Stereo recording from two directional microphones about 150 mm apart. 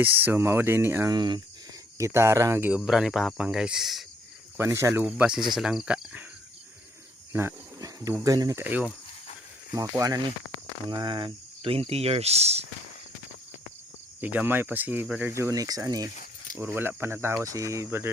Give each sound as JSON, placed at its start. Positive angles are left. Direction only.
{"t": 0.0, "sound": "speech", "side_deg": -15}
{"t": 1.1, "sound": "speech", "side_deg": -30}
{"t": 2.0, "sound": "speech", "side_deg": -20}
{"t": 4.5, "sound": "speech", "side_deg": -15}
{"t": 5.0, "sound": "speech", "side_deg": -5}
{"t": 7.3, "sound": "a sound", "side_deg": -20}
{"t": 8.1, "sound": "speech", "side_deg": -25}
{"t": 8.6, "sound": "speech", "side_deg": -10}
{"t": 9.7, "sound": "speech", "side_deg": -20}
{"t": 10.8, "sound": "speech", "side_deg": -30}
{"t": 14.2, "sound": "speech", "side_deg": -10}
{"t": 15.3, "sound": "speech", "side_deg": -20}
{"t": 16.6, "sound": "speech", "side_deg": -15}